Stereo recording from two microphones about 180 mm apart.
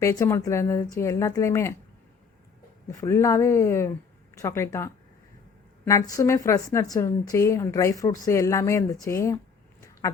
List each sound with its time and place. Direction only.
0.0 s a woman's voice: 15° left (ahead or behind)
2.8 s a woman's voice: 15° left (ahead or behind)